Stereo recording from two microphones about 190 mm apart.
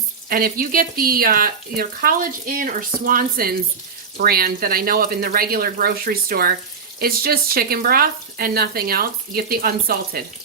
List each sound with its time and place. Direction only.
0.3 s speech: 50° right (ahead or behind)